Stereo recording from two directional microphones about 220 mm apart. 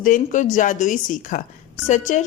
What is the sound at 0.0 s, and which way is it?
Speech, 35° left (ahead or behind).